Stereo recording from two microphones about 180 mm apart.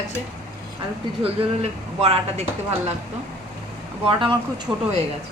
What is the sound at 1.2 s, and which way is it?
Speech, 35° right (ahead or behind).